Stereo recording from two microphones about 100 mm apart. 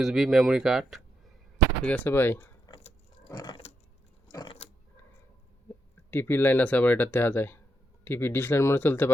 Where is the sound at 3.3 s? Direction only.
45° left (ahead or behind).